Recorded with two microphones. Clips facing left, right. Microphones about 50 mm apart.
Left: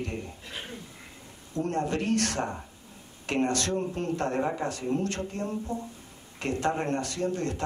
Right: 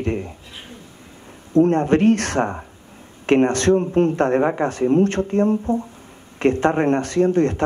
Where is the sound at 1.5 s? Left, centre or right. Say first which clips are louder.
Right 13 dB; right.